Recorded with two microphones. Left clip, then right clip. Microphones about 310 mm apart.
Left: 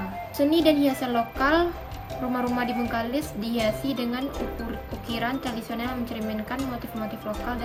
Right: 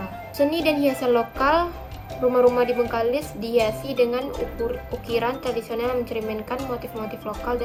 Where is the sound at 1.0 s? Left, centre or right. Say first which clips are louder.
Right 4 dB; centre.